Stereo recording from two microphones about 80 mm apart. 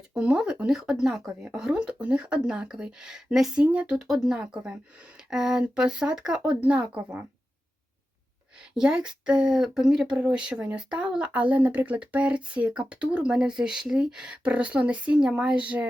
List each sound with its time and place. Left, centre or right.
0.1 s speech: centre
4.0 s speech: centre
8.7 s speech: centre